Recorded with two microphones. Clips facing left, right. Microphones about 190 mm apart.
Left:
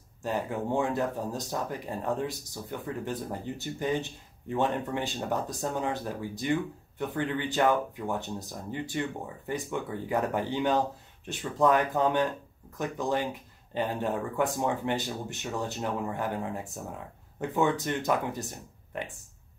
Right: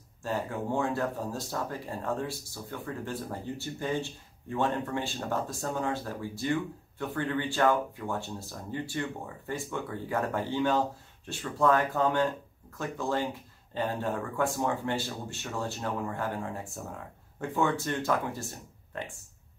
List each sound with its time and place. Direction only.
0.2 s speech: 15° left (ahead or behind)